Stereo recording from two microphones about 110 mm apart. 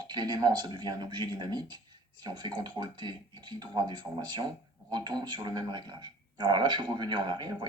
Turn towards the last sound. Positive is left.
turn(degrees=-40)  # may be behind; listen again after turning